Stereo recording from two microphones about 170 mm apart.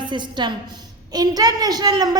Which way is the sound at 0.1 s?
25° right (ahead or behind).